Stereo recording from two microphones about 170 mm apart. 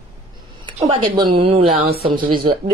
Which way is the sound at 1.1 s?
30° right (ahead or behind).